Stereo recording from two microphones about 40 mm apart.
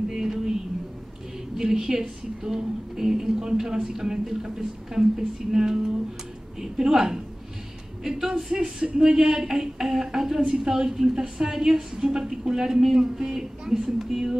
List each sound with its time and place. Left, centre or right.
0.1 s a sound: centre
1.6 s a woman's voice: centre
8.6 s a woman's voice: right